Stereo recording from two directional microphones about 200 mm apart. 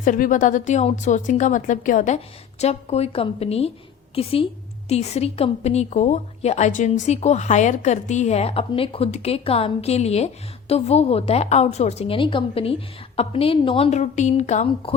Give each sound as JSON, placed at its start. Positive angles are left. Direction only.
{"t": 0.0, "sound": "a woman's voice", "side_deg": 40}